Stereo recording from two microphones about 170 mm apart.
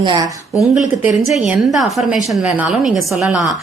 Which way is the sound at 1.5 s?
Centre (ahead or behind).